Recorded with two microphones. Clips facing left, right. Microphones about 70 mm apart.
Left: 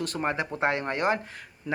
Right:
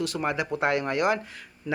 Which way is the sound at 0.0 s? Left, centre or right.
Left.